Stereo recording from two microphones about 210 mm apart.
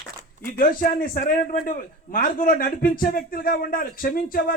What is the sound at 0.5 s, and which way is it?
Speech, 45° left (ahead or behind).